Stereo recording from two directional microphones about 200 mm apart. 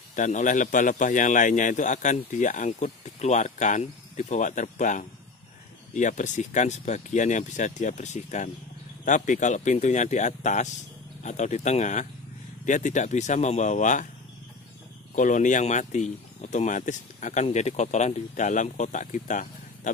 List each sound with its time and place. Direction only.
0.1 s a man's voice: 40° left (ahead or behind)
15.1 s a man's voice: 40° left (ahead or behind)